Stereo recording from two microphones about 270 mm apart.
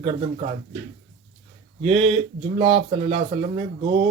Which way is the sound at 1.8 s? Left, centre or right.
Centre.